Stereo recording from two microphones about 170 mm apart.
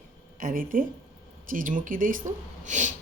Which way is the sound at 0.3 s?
55° right (ahead or behind).